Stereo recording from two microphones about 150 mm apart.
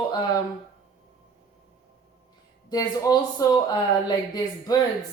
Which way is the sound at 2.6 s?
25° left (ahead or behind).